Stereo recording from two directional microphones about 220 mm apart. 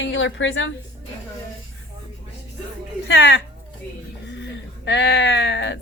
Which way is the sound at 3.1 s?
55° left (ahead or behind).